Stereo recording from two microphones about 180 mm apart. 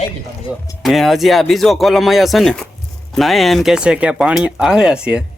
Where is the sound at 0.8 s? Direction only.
Centre (ahead or behind).